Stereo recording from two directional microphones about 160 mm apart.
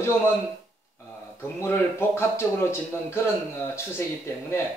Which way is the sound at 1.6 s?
15° left (ahead or behind).